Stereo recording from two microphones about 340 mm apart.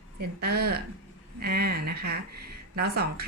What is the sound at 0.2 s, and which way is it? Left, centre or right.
Speech, right.